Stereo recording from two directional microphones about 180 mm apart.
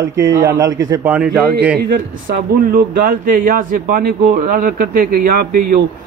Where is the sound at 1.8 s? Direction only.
50° right (ahead or behind).